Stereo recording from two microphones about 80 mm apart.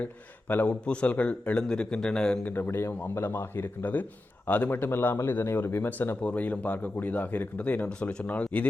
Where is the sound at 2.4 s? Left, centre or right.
Left.